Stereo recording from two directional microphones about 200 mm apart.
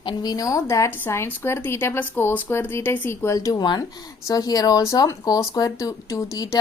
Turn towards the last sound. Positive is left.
turn(degrees=15)  # may be behind; listen again after turning